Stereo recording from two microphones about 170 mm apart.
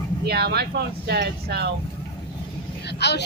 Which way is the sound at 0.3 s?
70° right (ahead or behind).